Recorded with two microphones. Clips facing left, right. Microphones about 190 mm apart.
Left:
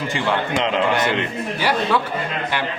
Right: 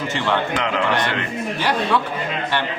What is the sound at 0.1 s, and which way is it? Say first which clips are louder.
Speech: even; 15° left (ahead or behind).